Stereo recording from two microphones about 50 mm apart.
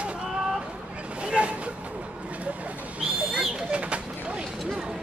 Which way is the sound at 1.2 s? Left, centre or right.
Right.